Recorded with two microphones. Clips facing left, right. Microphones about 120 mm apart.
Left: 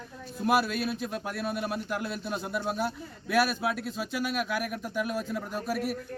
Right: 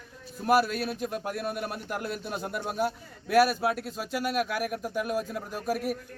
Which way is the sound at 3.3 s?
45° right (ahead or behind).